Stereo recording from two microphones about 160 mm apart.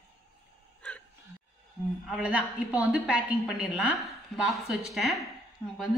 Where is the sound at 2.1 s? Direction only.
5° right (ahead or behind).